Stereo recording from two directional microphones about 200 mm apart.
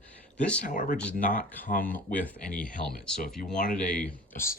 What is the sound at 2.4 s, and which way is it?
Speech, 5° left (ahead or behind).